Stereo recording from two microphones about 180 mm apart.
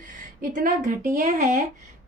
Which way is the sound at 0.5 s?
45° right (ahead or behind).